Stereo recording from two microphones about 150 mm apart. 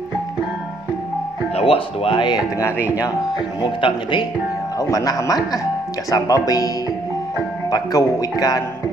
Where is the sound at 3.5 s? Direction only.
30° left (ahead or behind).